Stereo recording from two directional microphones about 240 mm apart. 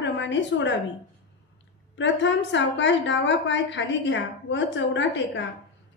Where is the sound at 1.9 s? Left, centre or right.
Left.